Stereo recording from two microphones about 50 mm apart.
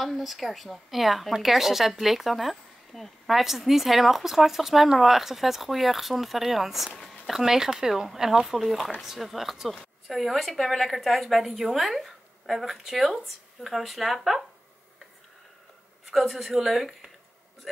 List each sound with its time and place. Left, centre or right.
0.0 s speech: centre
16.1 s speech: centre